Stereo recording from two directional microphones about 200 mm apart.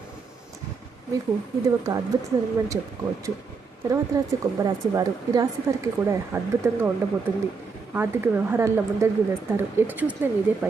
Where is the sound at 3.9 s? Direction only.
15° right (ahead or behind).